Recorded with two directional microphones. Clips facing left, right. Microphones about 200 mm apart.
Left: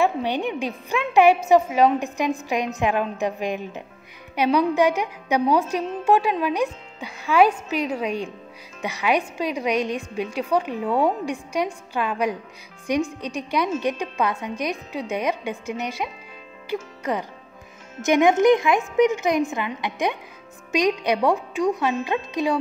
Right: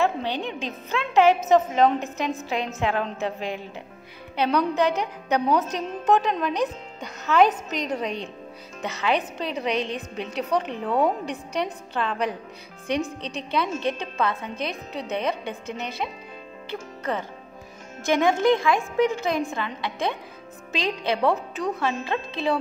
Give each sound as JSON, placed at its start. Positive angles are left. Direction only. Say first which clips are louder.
{"t": 0.0, "sound": "a woman's voice", "louder": "left 3 dB", "side_deg": 15}